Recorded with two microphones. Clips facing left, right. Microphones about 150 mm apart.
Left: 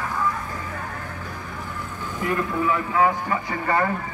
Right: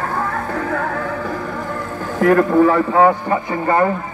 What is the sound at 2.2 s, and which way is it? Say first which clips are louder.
Speech: right 12 dB; 60° right (ahead or behind).